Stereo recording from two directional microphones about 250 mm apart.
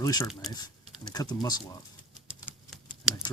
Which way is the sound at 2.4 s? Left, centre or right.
Centre.